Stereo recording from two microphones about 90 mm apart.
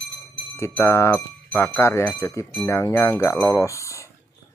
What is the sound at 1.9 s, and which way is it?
Speech, 30° left (ahead or behind).